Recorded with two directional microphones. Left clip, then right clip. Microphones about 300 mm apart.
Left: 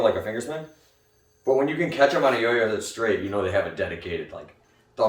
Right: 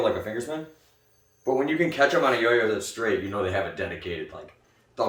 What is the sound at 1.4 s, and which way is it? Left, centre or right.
Speech, centre.